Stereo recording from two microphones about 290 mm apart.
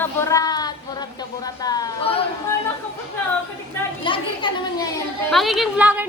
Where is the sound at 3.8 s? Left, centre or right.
Centre.